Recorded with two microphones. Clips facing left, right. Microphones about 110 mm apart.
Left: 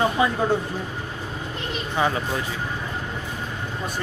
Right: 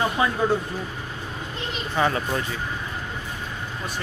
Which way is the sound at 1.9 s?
10° left (ahead or behind).